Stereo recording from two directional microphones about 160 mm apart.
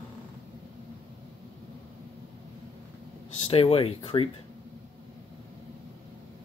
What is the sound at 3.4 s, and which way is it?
Speech, 35° left (ahead or behind).